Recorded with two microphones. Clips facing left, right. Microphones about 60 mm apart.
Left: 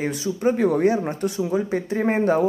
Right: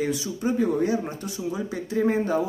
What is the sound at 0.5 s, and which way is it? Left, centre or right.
Speech, left.